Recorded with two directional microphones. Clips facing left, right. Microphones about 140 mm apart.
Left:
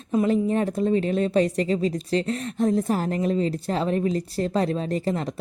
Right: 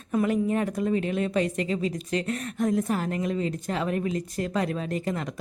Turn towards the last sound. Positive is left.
turn(degrees=30)  # may be behind; listen again after turning